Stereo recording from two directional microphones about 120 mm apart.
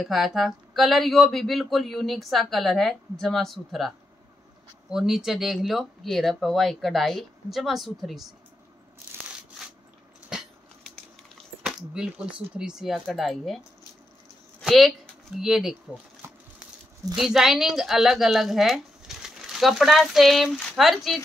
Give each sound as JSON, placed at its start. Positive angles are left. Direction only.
{"t": 0.0, "sound": "speech", "side_deg": 0}
{"t": 4.9, "sound": "speech", "side_deg": -5}
{"t": 10.3, "sound": "a sound", "side_deg": -5}
{"t": 11.6, "sound": "speech", "side_deg": -5}
{"t": 14.6, "sound": "speech", "side_deg": 0}
{"t": 17.2, "sound": "a woman's voice", "side_deg": -5}